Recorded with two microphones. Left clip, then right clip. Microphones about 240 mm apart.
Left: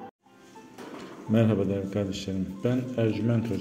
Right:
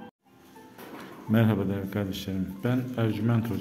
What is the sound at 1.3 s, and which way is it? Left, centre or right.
A man's voice, centre.